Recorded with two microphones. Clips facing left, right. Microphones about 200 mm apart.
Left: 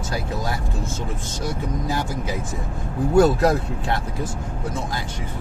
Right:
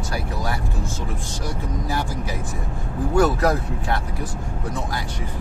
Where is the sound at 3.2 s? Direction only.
25° left (ahead or behind).